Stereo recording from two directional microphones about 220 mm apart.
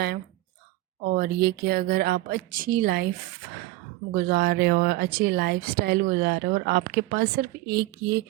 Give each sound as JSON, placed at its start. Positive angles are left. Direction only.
{"t": 1.0, "sound": "speech", "side_deg": -45}
{"t": 4.1, "sound": "speech", "side_deg": -45}